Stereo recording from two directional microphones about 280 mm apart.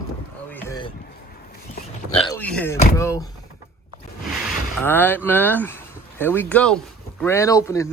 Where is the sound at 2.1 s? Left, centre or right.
Centre.